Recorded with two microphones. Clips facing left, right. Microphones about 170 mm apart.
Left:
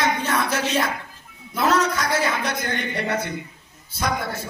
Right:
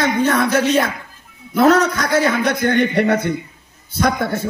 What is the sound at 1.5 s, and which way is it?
A man's voice, 60° right (ahead or behind).